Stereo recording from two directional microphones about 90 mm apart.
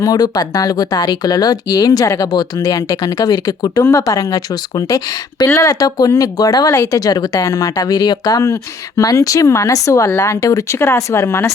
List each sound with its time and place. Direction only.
0.0 s a woman's voice: 45° left (ahead or behind)
6.7 s speech: 35° left (ahead or behind)